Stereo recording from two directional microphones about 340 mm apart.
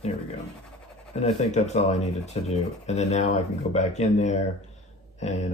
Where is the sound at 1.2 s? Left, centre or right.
Centre.